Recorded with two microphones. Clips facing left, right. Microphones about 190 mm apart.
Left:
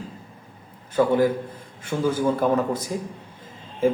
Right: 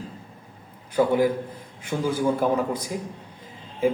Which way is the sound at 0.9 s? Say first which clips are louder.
Left 1 dB; 10° right (ahead or behind).